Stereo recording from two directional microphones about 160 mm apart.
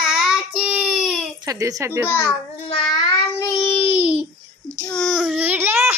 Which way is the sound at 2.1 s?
15° left (ahead or behind).